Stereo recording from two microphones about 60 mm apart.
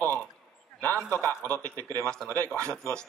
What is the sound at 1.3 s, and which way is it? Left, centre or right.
Speech, left.